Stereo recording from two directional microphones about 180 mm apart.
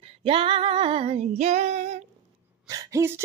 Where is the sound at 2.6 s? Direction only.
20° right (ahead or behind).